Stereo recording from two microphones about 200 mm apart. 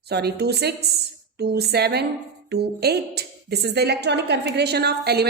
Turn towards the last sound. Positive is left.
turn(degrees=-55)  # may be behind; listen again after turning